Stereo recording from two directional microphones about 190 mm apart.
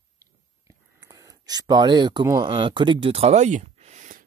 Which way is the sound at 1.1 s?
20° right (ahead or behind).